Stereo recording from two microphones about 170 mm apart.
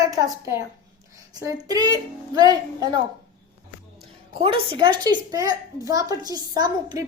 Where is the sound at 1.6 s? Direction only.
20° right (ahead or behind).